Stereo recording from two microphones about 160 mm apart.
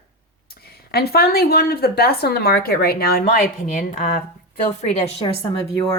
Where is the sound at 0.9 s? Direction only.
80° left.